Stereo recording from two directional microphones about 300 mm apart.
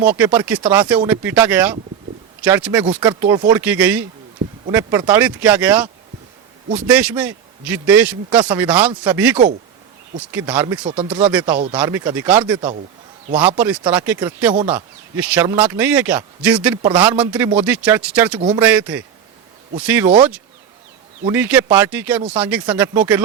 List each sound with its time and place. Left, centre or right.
0.2 s speech: centre
10.8 s speech: centre
11.2 s speech: centre
13.6 s speech: centre
18.3 s speech: centre
18.6 s speech: centre
21.2 s speech: centre